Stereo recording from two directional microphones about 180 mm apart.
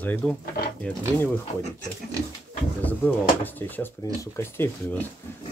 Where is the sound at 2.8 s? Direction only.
10° left (ahead or behind).